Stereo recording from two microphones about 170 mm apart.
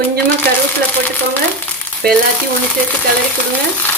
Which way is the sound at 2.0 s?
65° right (ahead or behind).